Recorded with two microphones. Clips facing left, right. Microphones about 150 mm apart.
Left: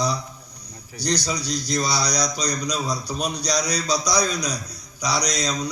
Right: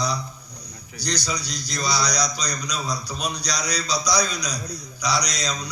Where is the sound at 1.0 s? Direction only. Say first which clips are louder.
Left 3 dB; 50° left (ahead or behind).